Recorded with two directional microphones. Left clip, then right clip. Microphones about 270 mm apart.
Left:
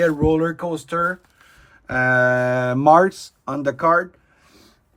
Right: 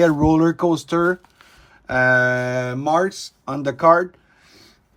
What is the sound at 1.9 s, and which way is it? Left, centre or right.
A man's voice, centre.